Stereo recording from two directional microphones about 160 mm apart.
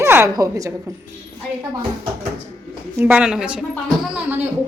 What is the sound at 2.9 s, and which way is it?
A woman's voice, 10° right (ahead or behind).